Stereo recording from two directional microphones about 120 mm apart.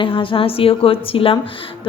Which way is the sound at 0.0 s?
45° left (ahead or behind).